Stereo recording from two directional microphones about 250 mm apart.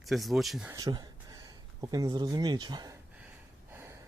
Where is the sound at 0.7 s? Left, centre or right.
Centre.